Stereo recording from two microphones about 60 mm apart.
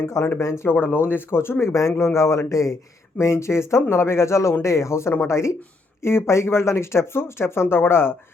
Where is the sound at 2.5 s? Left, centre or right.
Left.